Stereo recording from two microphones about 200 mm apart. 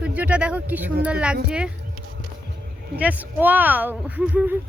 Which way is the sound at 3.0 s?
10° right (ahead or behind).